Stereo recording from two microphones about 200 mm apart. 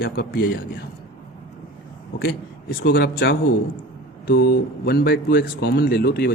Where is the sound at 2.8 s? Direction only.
50° left (ahead or behind).